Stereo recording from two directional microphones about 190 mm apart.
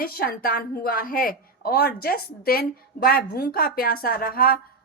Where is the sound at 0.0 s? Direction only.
50° left (ahead or behind).